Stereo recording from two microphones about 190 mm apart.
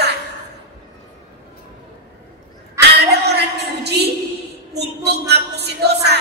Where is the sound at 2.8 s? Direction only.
60° right (ahead or behind).